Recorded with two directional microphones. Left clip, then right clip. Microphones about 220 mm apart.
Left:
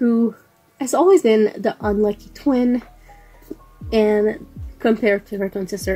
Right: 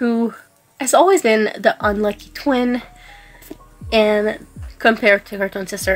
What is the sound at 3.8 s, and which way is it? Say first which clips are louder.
Speech: right 2 dB; 45° right (ahead or behind).